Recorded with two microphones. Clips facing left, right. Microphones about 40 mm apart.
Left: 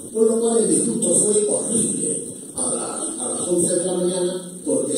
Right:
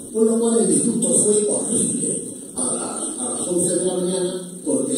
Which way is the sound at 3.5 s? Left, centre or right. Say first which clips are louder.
Even; centre.